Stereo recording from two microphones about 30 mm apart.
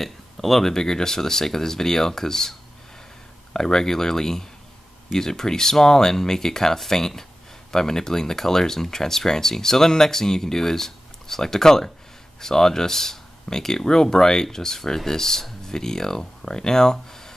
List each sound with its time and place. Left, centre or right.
0.0 s speech: centre
3.5 s speech: left